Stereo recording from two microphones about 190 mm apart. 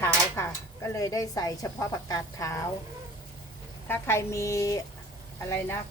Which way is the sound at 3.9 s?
15° left (ahead or behind).